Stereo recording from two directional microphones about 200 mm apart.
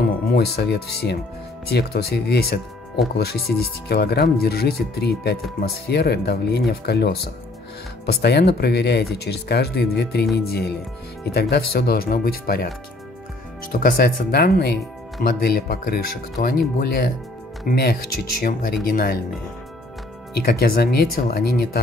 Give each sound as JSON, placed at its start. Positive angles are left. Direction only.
{"t": 0.3, "sound": "speech", "side_deg": 55}
{"t": 13.7, "sound": "speech", "side_deg": 45}
{"t": 20.4, "sound": "speech", "side_deg": 50}